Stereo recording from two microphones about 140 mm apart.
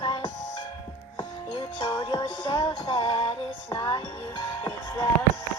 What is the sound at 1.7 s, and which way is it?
Music, 35° left (ahead or behind).